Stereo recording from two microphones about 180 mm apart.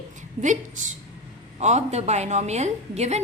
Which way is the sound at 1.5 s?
40° right (ahead or behind).